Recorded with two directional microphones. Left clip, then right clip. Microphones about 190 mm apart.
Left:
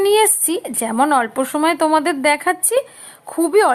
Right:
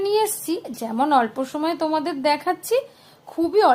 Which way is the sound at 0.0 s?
25° left (ahead or behind).